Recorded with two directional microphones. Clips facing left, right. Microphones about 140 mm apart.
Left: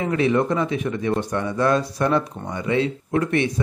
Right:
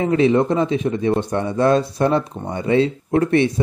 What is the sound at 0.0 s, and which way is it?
Speech, 25° right (ahead or behind).